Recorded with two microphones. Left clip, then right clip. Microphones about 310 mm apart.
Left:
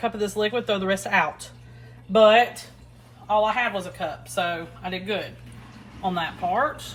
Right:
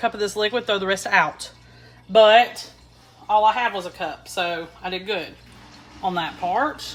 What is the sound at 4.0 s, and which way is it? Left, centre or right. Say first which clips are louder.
Speech: right 1 dB; right.